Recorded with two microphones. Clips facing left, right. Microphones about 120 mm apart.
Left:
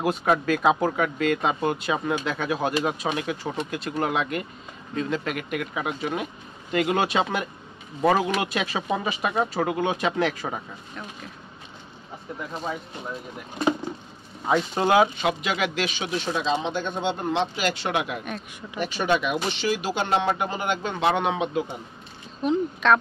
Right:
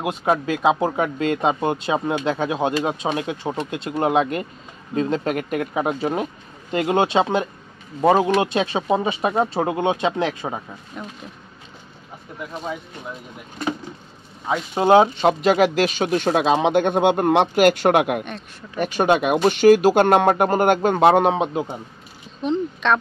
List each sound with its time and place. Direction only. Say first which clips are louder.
0.0 s speech: right 1 dB; 20° right (ahead or behind)
14.9 s speech: right 7 dB; 30° right (ahead or behind)
22.4 s speech: right 1 dB; 5° left (ahead or behind)